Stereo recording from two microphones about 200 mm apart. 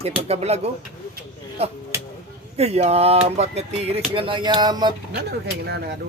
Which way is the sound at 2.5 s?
30° right (ahead or behind).